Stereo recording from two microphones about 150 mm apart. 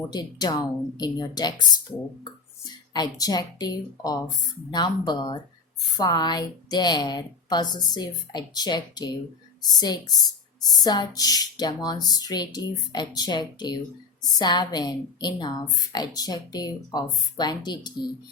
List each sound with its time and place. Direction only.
0.1 s speech: 25° left (ahead or behind)
2.9 s speech: 25° left (ahead or behind)